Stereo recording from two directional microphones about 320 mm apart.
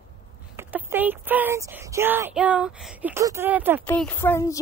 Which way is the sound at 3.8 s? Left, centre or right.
Centre.